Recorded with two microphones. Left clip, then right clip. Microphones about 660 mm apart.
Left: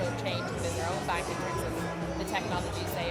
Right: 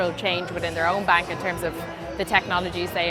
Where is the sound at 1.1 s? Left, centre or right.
Right.